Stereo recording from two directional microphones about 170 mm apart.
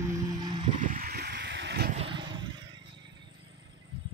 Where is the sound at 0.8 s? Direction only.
60° right (ahead or behind).